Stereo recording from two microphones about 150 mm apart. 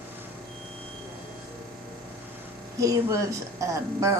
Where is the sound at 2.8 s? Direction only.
20° right (ahead or behind).